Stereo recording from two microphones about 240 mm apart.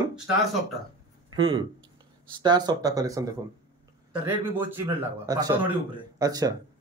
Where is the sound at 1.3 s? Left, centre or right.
Centre.